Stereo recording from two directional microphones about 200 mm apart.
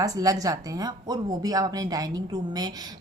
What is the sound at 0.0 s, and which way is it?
A woman's voice, 20° right (ahead or behind).